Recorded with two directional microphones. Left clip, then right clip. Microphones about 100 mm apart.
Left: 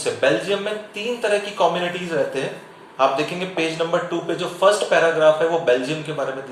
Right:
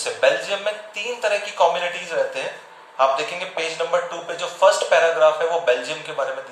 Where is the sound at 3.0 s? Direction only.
35° left (ahead or behind).